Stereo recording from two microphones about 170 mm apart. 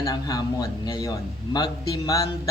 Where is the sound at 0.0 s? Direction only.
20° left (ahead or behind).